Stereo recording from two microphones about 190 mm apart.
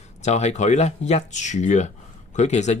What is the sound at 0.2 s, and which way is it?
Speech, 35° left (ahead or behind).